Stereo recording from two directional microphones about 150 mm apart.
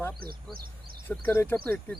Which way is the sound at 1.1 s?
10° left (ahead or behind).